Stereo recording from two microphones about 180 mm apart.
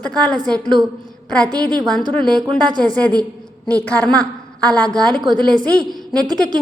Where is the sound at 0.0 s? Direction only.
5° left (ahead or behind).